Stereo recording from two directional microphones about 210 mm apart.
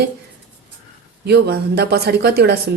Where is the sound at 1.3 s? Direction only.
50° right (ahead or behind).